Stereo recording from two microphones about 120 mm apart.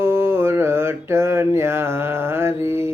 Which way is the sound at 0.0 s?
20° right (ahead or behind).